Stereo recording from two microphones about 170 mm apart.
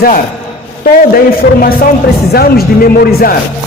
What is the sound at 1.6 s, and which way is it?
A man's voice, 60° left (ahead or behind).